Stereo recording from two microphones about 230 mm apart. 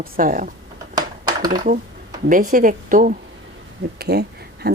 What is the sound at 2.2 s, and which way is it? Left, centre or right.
Speech, right.